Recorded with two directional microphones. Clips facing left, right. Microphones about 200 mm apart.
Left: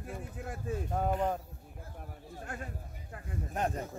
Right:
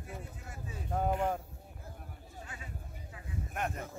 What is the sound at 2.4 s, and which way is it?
Speech, 55° left (ahead or behind).